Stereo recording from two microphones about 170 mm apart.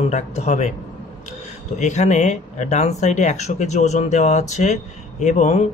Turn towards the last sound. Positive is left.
turn(degrees=45)  # may be behind; listen again after turning